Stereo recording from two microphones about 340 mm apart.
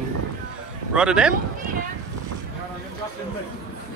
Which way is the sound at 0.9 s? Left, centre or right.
Centre.